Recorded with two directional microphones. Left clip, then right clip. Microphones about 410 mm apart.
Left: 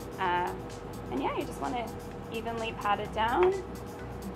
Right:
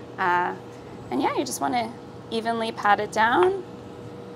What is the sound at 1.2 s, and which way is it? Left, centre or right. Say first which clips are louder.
A woman's voice: right 8 dB; right.